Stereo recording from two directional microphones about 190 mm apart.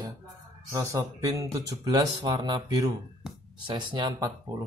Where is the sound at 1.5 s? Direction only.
20° right (ahead or behind).